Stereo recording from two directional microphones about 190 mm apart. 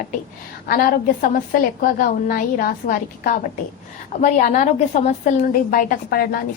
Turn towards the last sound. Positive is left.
turn(degrees=55)  # may be behind; listen again after turning